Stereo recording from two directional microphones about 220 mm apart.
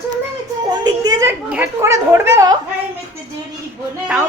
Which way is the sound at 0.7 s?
15° right (ahead or behind).